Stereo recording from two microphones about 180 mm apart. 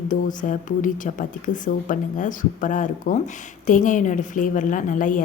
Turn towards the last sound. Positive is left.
turn(degrees=45)  # may be behind; listen again after turning